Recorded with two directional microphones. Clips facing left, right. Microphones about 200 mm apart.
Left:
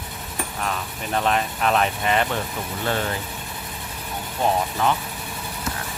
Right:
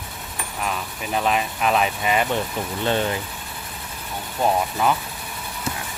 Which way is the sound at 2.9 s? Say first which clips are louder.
Right 3 dB; 20° right (ahead or behind).